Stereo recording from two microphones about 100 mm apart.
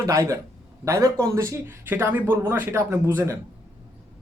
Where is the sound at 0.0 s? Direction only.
30° right (ahead or behind).